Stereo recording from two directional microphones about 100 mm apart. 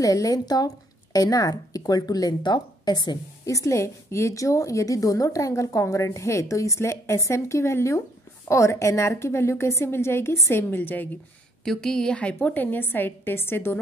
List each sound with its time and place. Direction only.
0.0 s a woman's voice: 35° left (ahead or behind)
3.4 s a woman's voice: 30° left (ahead or behind)
11.6 s a woman's voice: 5° left (ahead or behind); by 13.7 s 25° left (ahead or behind)